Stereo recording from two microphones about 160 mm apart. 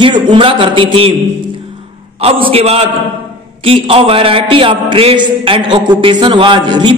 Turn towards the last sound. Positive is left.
turn(degrees=-30)  # may be behind; listen again after turning